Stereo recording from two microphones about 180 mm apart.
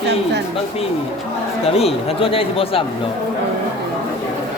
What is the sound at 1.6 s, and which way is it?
Speech, 35° left (ahead or behind).